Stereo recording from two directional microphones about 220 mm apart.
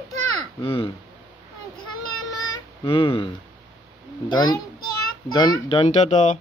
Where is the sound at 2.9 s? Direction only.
25° left (ahead or behind).